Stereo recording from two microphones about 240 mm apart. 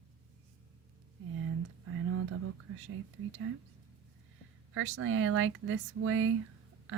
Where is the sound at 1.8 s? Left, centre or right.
Right.